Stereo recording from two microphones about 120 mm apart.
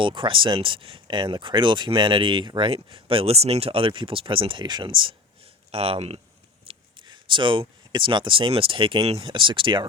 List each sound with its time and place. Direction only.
0.0 s speech: 45° right (ahead or behind)
6.7 s speech: 40° right (ahead or behind)